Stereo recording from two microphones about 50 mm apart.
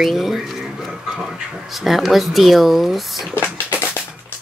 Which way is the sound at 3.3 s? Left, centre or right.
Left.